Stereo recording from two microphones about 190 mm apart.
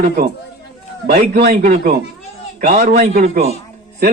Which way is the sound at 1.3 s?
55° right (ahead or behind).